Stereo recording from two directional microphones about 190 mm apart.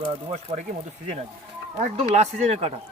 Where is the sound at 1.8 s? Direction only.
35° right (ahead or behind).